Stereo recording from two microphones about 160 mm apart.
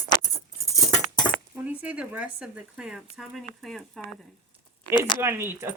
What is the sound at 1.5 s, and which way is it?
Speech, 10° right (ahead or behind).